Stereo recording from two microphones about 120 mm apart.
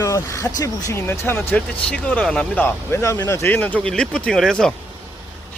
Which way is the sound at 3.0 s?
25° left (ahead or behind).